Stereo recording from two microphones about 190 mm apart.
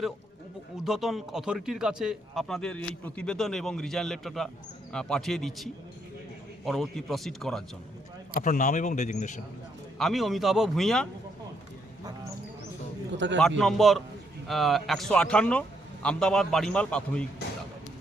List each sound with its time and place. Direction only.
0.9 s a man's voice: centre (ahead or behind)
8.4 s a man's voice: 40° left (ahead or behind)
10.0 s a man's voice: centre (ahead or behind)
13.1 s a man's voice: 70° right (ahead or behind)
13.6 s a man's voice: centre (ahead or behind)